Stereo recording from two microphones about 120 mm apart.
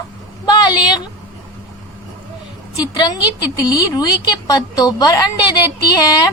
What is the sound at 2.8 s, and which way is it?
A woman's voice, 35° left (ahead or behind).